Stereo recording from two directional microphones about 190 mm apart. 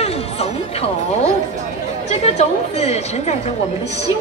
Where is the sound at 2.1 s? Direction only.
35° left (ahead or behind).